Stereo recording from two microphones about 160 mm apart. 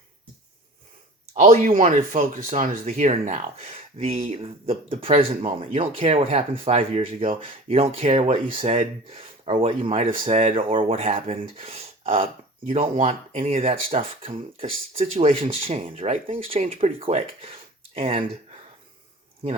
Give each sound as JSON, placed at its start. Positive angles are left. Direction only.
{"t": 1.3, "sound": "speech", "side_deg": -45}